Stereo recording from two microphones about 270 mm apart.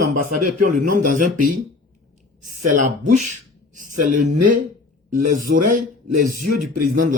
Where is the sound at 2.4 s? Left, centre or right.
Right.